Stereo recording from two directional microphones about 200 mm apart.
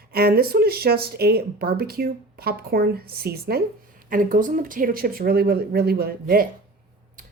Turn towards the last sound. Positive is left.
turn(degrees=-50)  # may be behind; listen again after turning